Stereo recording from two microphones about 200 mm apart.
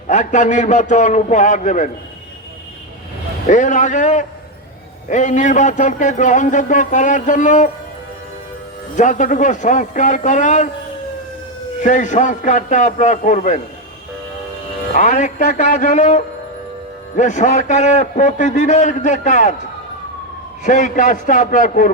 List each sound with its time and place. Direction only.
0.1 s speech: 35° left (ahead or behind)
3.4 s speech: 40° left (ahead or behind)
9.0 s speech: 40° left (ahead or behind)
11.8 s speech: 40° left (ahead or behind)
14.9 s speech: 40° left (ahead or behind)
20.7 s speech: 40° left (ahead or behind)